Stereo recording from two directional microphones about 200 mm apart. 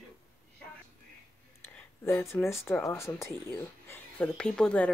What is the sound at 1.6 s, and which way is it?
Speech, 10° left (ahead or behind).